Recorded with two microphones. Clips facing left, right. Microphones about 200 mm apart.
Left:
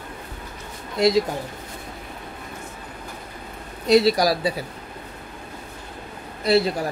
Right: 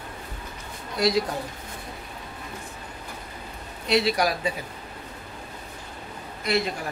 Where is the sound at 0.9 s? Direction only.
25° left (ahead or behind).